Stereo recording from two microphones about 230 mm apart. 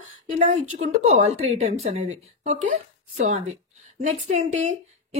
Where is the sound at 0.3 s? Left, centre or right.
Right.